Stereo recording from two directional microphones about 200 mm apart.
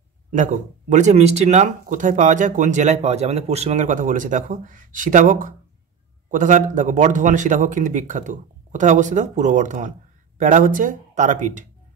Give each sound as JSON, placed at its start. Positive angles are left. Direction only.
{"t": 0.3, "sound": "a man's voice", "side_deg": -40}